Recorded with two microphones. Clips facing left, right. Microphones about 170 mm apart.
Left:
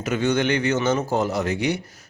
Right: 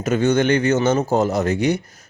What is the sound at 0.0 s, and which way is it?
A man's voice, 45° right (ahead or behind).